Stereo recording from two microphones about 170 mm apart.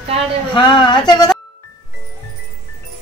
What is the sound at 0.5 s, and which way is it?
Speech, 25° left (ahead or behind).